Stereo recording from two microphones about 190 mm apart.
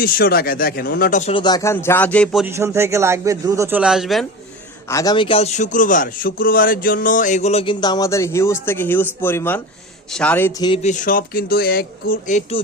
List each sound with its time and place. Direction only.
0.0 s speech: 50° left (ahead or behind)
1.3 s speech: 25° left (ahead or behind); by 2.4 s 5° left (ahead or behind)
2.4 s a man's voice: 15° right (ahead or behind)
4.9 s a man's voice: 20° left (ahead or behind)
10.8 s speech: 45° left (ahead or behind)